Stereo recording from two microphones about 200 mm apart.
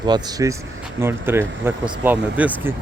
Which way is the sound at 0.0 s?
20° right (ahead or behind).